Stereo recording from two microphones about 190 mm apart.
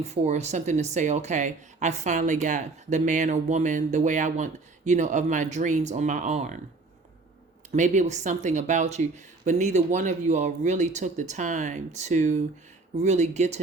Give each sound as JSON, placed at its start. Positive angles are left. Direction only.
{"t": 0.0, "sound": "speech", "side_deg": -35}
{"t": 7.7, "sound": "speech", "side_deg": -40}